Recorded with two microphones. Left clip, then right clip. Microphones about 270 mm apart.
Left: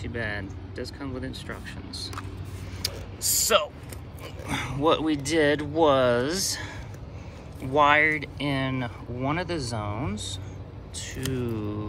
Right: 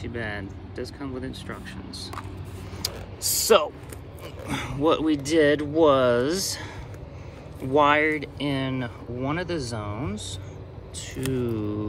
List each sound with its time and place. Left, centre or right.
0.0 s speech: centre
2.8 s a sound: right
3.2 s speech: right
4.5 s speech: centre
7.7 s speech: centre